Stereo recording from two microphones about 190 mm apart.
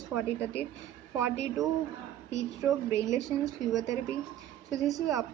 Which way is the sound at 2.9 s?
15° right (ahead or behind).